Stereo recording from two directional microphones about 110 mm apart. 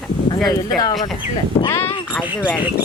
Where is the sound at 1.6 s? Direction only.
20° left (ahead or behind).